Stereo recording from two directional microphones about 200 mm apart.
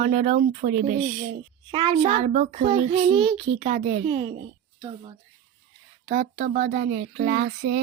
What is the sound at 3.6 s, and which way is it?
Speech, 35° right (ahead or behind).